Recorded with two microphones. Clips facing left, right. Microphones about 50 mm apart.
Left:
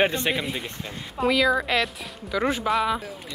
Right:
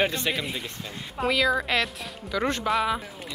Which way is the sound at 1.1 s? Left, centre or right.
Centre.